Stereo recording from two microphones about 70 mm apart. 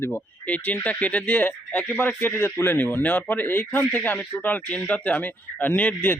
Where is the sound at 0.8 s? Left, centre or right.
Left.